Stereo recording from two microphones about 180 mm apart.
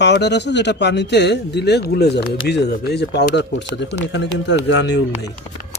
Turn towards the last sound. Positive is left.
turn(degrees=70)  # may be behind; listen again after turning